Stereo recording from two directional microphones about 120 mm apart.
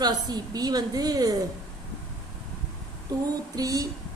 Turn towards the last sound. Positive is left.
turn(degrees=-30)  # may be behind; listen again after turning